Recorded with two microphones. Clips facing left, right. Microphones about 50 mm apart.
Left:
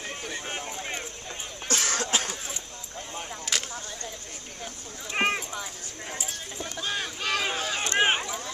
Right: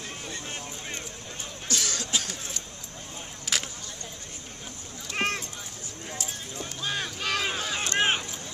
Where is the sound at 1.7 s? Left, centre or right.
Left.